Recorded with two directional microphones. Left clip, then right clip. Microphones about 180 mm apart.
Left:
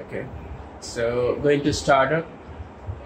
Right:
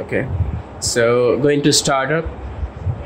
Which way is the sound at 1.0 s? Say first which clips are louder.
Right 8 dB; 65° right (ahead or behind).